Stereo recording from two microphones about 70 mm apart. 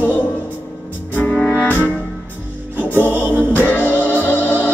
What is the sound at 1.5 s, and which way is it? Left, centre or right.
Music, left.